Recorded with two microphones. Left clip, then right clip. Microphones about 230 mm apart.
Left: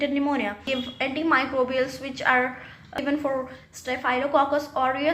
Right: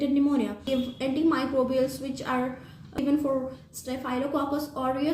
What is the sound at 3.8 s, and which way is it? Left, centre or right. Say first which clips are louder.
A woman's voice: left 6 dB; right.